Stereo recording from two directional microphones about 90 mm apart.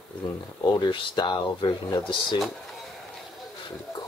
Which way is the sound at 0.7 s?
55° left (ahead or behind).